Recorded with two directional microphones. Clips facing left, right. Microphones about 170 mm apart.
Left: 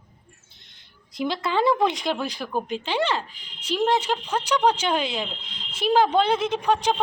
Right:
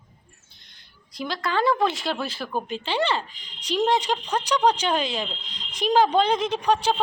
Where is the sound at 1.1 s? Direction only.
20° left (ahead or behind).